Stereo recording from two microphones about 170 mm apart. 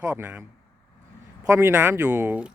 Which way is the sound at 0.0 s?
10° right (ahead or behind).